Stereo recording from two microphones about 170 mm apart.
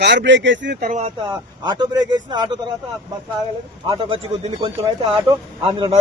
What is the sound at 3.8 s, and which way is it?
Speech, 35° right (ahead or behind).